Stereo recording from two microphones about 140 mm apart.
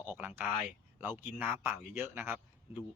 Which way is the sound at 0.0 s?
15° right (ahead or behind).